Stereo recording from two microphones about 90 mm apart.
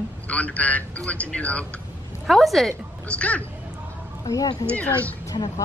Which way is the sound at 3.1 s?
15° left (ahead or behind).